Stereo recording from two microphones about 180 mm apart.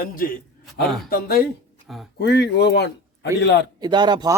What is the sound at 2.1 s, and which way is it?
A man's voice, 70° left (ahead or behind).